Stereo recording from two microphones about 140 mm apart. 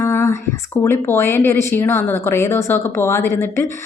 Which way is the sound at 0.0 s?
20° left (ahead or behind).